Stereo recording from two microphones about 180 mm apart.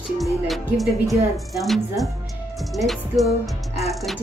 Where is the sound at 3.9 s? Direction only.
Centre (ahead or behind).